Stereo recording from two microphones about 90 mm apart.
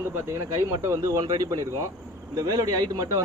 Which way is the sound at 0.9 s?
35° right (ahead or behind).